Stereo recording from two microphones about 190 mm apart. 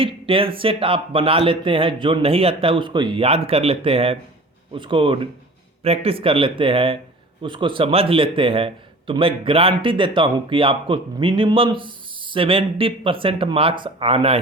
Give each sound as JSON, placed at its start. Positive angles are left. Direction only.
{"t": 0.0, "sound": "a man's voice", "side_deg": -30}